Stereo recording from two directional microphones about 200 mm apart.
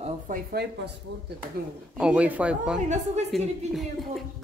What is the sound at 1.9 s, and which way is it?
A woman's voice, 5° right (ahead or behind).